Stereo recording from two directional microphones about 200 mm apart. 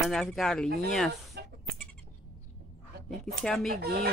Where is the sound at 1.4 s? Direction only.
55° right (ahead or behind).